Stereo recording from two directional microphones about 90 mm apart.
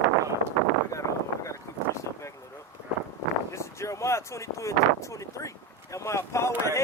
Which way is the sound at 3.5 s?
35° left (ahead or behind).